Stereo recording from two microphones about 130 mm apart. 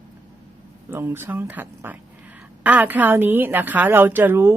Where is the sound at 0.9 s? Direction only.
15° right (ahead or behind).